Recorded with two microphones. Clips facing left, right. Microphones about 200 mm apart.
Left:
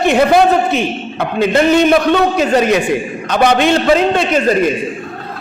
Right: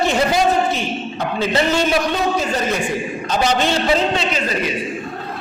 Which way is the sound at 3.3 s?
60° left (ahead or behind).